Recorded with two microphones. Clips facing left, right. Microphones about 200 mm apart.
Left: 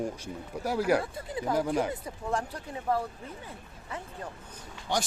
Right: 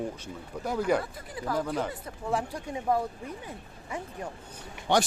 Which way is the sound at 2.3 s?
10° right (ahead or behind).